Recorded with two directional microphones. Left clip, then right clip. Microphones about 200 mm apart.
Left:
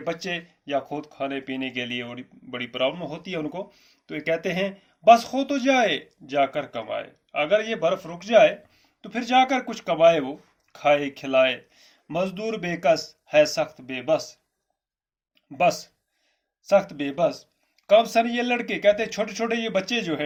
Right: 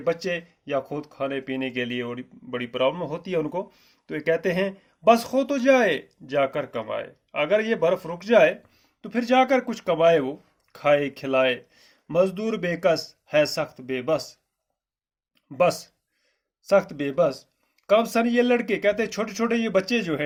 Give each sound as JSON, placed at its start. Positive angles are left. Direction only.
{"t": 0.0, "sound": "speech", "side_deg": -50}
{"t": 15.5, "sound": "speech", "side_deg": -55}